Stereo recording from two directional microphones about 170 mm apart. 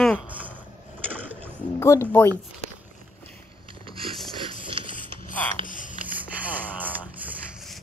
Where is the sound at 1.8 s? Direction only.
15° left (ahead or behind).